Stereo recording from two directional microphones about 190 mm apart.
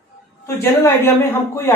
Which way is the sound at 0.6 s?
10° left (ahead or behind).